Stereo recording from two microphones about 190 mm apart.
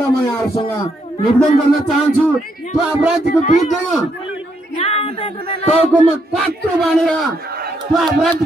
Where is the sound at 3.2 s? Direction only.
40° left (ahead or behind).